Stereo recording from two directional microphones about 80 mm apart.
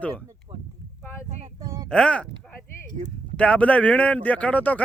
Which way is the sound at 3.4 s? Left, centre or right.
Centre.